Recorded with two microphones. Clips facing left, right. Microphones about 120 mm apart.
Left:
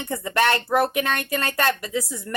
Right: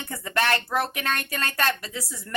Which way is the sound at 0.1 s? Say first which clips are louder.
Left 4 dB; 25° left (ahead or behind).